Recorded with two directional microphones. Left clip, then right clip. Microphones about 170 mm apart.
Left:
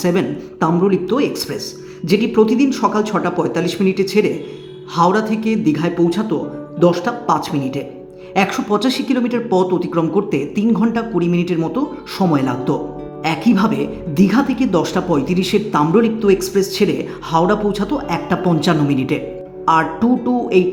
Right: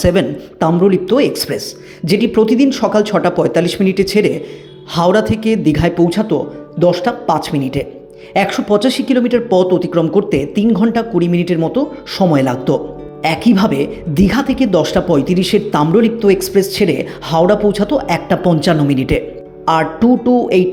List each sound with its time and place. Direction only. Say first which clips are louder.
0.0 s a woman's voice: right 4 dB; 20° right (ahead or behind)